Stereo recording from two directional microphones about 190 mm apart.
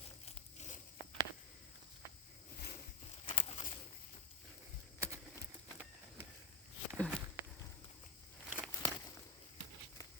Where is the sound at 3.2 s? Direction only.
25° left (ahead or behind).